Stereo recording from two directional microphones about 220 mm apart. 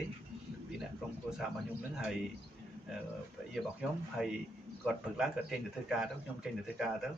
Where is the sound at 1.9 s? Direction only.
5° right (ahead or behind).